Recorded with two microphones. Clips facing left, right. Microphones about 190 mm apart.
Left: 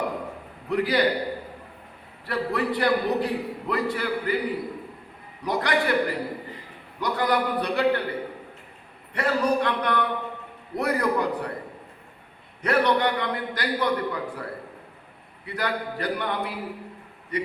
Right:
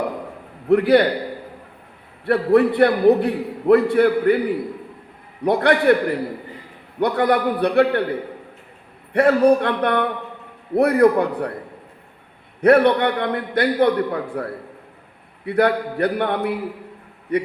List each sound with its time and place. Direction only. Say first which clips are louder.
0.7 s a man's voice: right 9 dB; 60° right (ahead or behind)
2.2 s a man's voice: right 11 dB; 60° right (ahead or behind)
5.4 s a man's voice: right 8 dB; 60° right (ahead or behind)
9.1 s a man's voice: right 9 dB; 60° right (ahead or behind)
12.6 s a man's voice: right 8 dB; 60° right (ahead or behind)
15.4 s a man's voice: right 11 dB; 60° right (ahead or behind)